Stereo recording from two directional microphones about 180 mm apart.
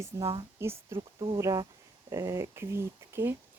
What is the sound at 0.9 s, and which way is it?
Speech, 30° right (ahead or behind).